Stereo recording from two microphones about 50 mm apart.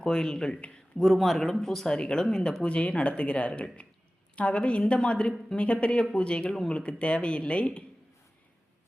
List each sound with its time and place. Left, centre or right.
0.0 s speech: centre
0.9 s a woman's voice: centre; by 7.9 s left